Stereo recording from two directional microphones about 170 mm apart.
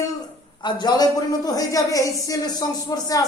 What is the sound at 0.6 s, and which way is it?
A woman's voice, 25° left (ahead or behind).